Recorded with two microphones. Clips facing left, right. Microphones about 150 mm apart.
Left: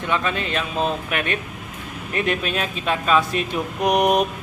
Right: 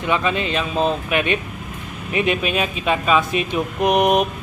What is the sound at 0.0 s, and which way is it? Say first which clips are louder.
Speech: right 3 dB; 5° right (ahead or behind).